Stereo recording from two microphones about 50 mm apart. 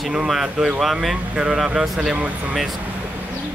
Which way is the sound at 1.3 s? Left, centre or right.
Right.